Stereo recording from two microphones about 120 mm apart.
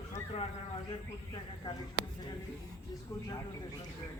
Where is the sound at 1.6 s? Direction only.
35° left (ahead or behind).